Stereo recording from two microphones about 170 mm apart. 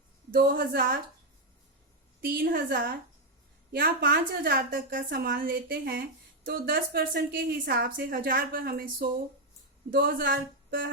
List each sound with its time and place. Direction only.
0.3 s a woman's voice: 65° right (ahead or behind)
2.2 s a woman's voice: 60° right (ahead or behind)